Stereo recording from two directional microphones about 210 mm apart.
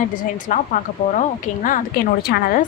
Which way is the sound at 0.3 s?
40° left (ahead or behind).